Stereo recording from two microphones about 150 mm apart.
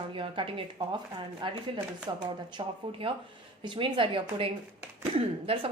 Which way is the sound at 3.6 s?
35° right (ahead or behind).